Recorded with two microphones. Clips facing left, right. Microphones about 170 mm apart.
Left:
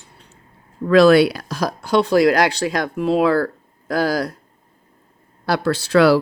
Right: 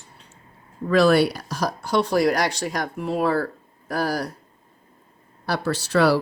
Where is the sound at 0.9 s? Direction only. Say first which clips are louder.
Left 5 dB; 90° left.